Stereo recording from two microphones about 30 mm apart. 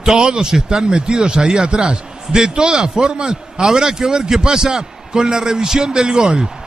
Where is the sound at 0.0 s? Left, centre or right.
Right.